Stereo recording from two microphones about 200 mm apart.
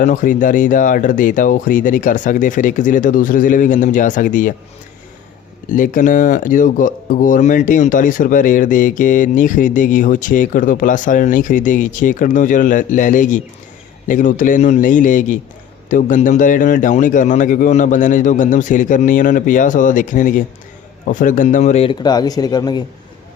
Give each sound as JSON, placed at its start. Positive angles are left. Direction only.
{"t": 0.0, "sound": "speech", "side_deg": 40}
{"t": 5.6, "sound": "speech", "side_deg": 40}